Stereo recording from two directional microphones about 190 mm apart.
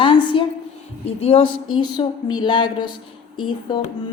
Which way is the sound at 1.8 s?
20° left (ahead or behind).